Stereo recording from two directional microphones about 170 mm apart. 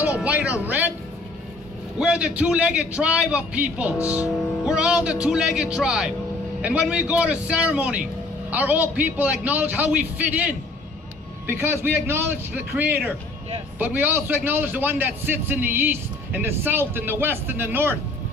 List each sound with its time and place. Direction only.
0.0 s a man's voice: 10° right (ahead or behind)
2.0 s a man's voice: 5° right (ahead or behind)
4.0 s music: 10° right (ahead or behind)
6.6 s a man's voice: 5° right (ahead or behind)